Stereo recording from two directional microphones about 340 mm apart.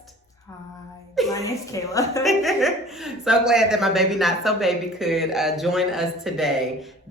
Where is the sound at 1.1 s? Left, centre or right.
Centre.